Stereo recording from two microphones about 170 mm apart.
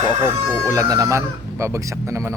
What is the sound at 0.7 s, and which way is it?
Speech, 20° right (ahead or behind).